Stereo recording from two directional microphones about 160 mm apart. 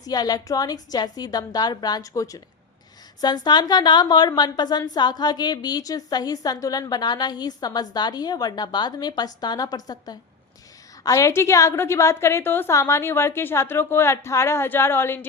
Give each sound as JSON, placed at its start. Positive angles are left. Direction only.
{"t": 0.0, "sound": "a woman's voice", "side_deg": 25}